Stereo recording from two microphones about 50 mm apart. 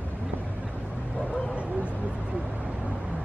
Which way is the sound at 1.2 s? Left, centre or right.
Left.